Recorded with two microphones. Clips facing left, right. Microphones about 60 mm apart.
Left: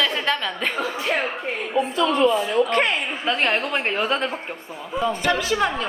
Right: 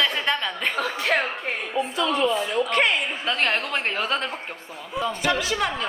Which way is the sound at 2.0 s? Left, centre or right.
Left.